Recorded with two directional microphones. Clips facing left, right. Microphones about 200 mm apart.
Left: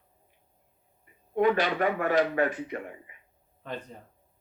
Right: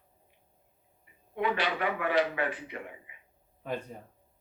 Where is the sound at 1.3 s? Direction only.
45° left (ahead or behind).